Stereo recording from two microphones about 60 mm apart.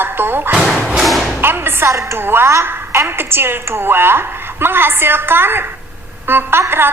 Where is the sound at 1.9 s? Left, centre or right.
Right.